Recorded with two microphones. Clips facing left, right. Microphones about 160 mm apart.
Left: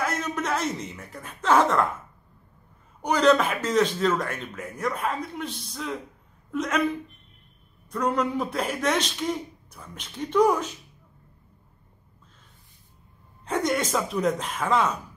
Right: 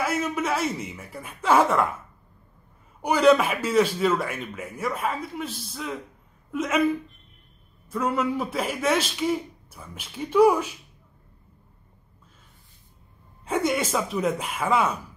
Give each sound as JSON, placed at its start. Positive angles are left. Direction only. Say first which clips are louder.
{"t": 0.0, "sound": "speech", "louder": "right 2 dB", "side_deg": -5}
{"t": 3.0, "sound": "speech", "louder": "right 2 dB", "side_deg": -10}
{"t": 13.5, "sound": "speech", "louder": "right 1 dB", "side_deg": -5}